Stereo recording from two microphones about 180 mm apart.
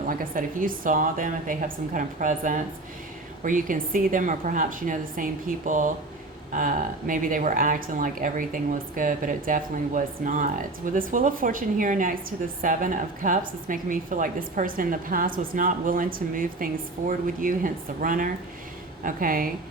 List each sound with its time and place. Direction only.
0.1 s speech: 50° right (ahead or behind)